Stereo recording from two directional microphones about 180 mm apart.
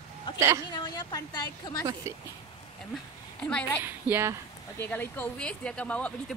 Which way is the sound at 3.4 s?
5° left (ahead or behind).